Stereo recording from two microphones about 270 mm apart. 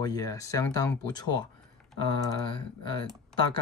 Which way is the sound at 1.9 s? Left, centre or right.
Centre.